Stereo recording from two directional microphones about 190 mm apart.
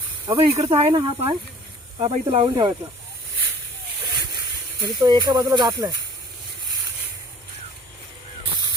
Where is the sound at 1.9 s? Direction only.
25° right (ahead or behind).